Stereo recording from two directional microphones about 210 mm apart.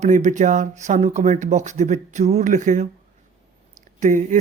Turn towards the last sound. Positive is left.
turn(degrees=-35)  # may be behind; listen again after turning